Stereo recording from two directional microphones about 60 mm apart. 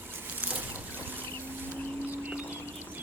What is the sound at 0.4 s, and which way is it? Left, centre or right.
Boat, right.